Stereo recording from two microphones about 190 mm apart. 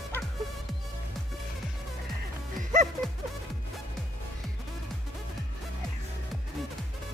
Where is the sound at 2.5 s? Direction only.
40° right (ahead or behind).